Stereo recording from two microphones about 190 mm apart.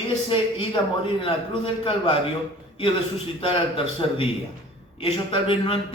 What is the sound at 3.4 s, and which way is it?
A man's voice, 30° left (ahead or behind).